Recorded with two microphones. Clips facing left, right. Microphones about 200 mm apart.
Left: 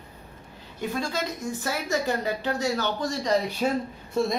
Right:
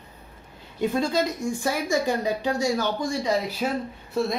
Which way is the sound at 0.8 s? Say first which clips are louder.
Right 6 dB; 20° right (ahead or behind).